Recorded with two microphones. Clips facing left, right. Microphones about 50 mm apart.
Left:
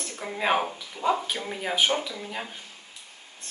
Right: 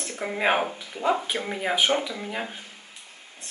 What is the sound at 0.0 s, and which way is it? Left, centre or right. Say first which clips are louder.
Speech: right 3 dB; right.